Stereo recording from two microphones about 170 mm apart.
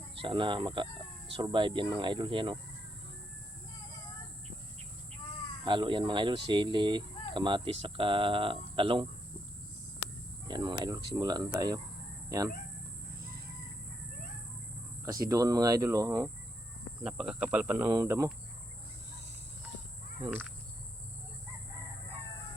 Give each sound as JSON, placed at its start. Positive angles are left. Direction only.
{"t": 0.2, "sound": "speech", "side_deg": -30}
{"t": 5.6, "sound": "speech", "side_deg": -30}
{"t": 10.5, "sound": "speech", "side_deg": -25}
{"t": 15.0, "sound": "speech", "side_deg": -20}
{"t": 17.0, "sound": "speech", "side_deg": -5}